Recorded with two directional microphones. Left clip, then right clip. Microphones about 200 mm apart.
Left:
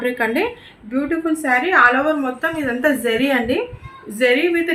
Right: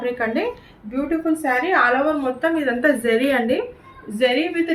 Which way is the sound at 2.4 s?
45° left (ahead or behind).